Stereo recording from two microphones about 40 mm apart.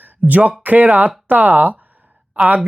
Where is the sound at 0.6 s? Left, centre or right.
Right.